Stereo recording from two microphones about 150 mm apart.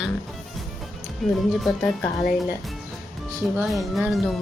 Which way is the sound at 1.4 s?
Centre (ahead or behind).